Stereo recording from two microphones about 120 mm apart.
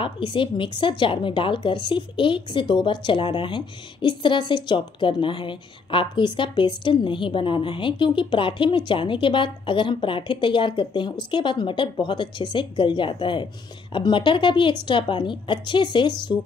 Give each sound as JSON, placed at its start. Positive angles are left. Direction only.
{"t": 0.0, "sound": "speech", "side_deg": 45}